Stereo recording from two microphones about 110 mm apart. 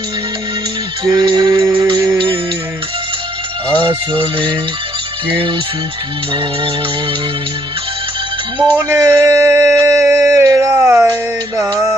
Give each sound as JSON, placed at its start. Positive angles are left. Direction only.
{"t": 1.0, "sound": "speech", "side_deg": -45}
{"t": 1.8, "sound": "music", "side_deg": -40}
{"t": 3.8, "sound": "speech", "side_deg": -50}
{"t": 8.8, "sound": "a sound", "side_deg": -25}
{"t": 11.1, "sound": "music", "side_deg": -25}